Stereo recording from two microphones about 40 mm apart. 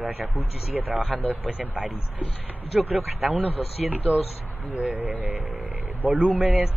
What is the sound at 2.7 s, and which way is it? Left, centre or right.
Speech, centre.